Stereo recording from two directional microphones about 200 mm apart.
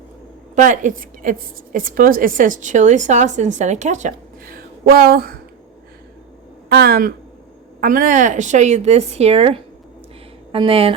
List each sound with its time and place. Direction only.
0.5 s a woman's voice: 40° right (ahead or behind)
6.7 s a woman's voice: 50° right (ahead or behind); by 10.9 s 30° right (ahead or behind)